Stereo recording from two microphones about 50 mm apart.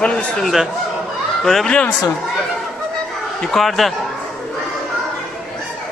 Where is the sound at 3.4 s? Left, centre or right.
Centre.